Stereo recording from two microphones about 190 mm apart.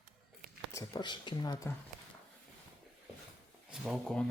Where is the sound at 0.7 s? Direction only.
20° left (ahead or behind).